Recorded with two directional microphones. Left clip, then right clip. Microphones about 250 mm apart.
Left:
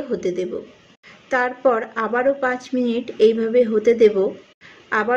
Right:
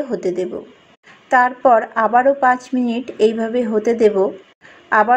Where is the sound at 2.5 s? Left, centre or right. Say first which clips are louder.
Right 2 dB; centre.